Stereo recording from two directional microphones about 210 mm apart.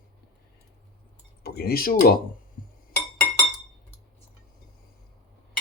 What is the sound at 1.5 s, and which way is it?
Speech, 45° left (ahead or behind).